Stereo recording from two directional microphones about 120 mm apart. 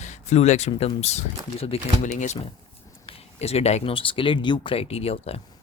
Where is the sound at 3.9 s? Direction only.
45° left (ahead or behind).